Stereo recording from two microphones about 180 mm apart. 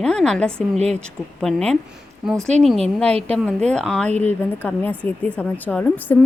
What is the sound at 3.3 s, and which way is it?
A woman's voice, 5° left (ahead or behind).